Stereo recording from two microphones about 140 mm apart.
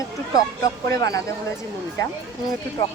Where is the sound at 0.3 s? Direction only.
25° left (ahead or behind).